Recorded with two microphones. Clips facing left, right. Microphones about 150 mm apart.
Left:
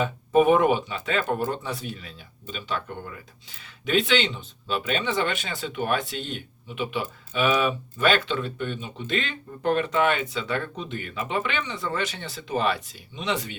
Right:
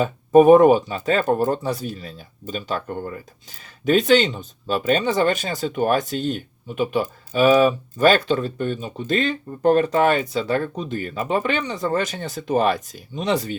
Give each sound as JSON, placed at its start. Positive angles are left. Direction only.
{"t": 0.0, "sound": "speech", "side_deg": -40}